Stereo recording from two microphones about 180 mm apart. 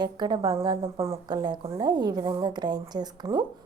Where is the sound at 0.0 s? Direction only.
25° right (ahead or behind).